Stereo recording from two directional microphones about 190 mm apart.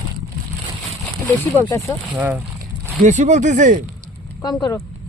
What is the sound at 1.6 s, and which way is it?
Speech, 15° left (ahead or behind).